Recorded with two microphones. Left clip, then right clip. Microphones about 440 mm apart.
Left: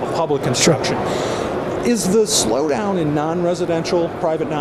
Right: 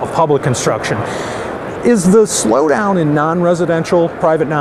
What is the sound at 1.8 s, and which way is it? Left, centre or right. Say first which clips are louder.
Speech: right 7 dB; right.